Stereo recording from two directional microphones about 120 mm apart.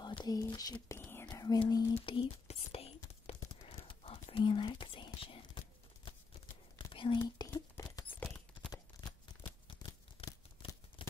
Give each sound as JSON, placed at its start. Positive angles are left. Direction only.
{"t": 0.2, "sound": "speech", "side_deg": 35}
{"t": 0.8, "sound": "whispering", "side_deg": 20}
{"t": 1.2, "sound": "whispering", "side_deg": 30}
{"t": 1.7, "sound": "speech", "side_deg": 35}
{"t": 2.0, "sound": "whispering", "side_deg": 50}
{"t": 6.9, "sound": "whispering", "side_deg": 40}
{"t": 11.0, "sound": "tearing", "side_deg": 45}